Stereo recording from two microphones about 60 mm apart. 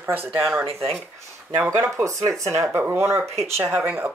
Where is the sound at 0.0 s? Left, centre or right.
Right.